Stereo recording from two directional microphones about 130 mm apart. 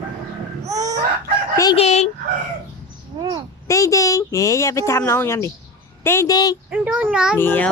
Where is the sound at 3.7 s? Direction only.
25° left (ahead or behind).